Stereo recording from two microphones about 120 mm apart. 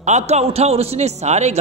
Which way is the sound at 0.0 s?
70° right (ahead or behind).